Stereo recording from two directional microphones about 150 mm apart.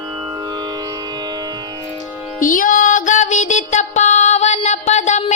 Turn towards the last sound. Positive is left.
turn(degrees=50)  # may be behind; listen again after turning